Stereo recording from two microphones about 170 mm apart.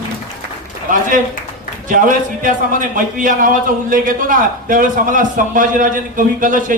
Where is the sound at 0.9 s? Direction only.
50° right (ahead or behind).